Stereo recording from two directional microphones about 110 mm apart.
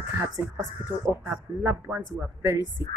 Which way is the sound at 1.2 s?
20° right (ahead or behind).